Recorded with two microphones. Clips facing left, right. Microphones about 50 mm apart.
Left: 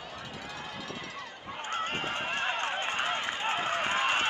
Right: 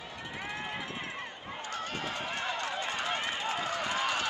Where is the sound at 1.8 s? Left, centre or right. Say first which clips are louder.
Left 4 dB; left.